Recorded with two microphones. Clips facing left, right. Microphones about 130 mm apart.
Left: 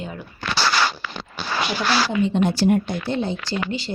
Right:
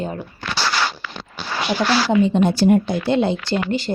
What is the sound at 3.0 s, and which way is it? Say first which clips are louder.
Speech: right 6 dB; 85° right.